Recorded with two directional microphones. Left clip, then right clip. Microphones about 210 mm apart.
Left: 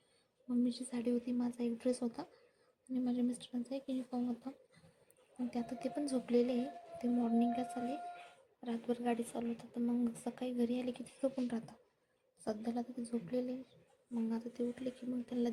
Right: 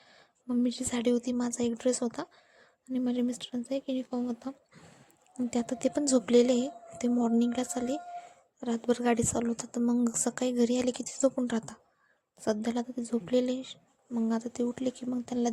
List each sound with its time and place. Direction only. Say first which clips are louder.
0.4 s speech: right 7 dB; 40° right (ahead or behind)